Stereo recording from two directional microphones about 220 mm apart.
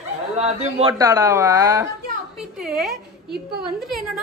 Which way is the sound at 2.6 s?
Centre (ahead or behind).